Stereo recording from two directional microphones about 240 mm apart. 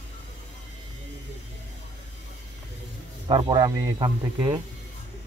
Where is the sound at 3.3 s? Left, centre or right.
Centre.